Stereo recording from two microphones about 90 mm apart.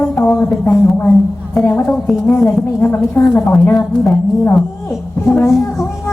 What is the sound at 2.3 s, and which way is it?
Speech, 30° left (ahead or behind).